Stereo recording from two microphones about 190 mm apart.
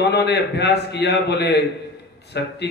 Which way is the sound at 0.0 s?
60° left (ahead or behind).